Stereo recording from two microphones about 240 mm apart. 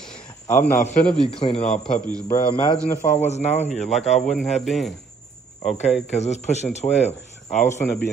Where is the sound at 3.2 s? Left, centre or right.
Left.